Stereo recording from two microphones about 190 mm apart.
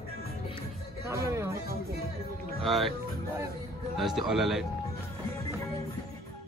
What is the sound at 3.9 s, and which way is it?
Speech, centre (ahead or behind).